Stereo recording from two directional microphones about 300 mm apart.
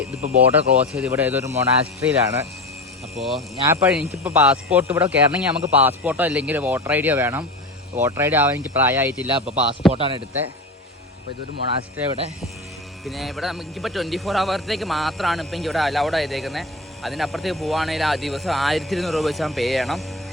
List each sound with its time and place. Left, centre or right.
0.2 s speech: right
0.9 s speech: centre
3.2 s speech: centre
9.9 s speech: centre
11.8 s speech: centre
13.1 s speech: centre